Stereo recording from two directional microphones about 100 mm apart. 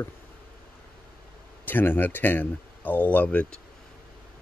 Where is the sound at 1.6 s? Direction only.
20° left (ahead or behind).